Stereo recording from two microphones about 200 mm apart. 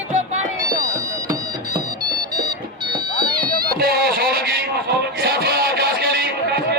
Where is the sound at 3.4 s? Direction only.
45° right (ahead or behind).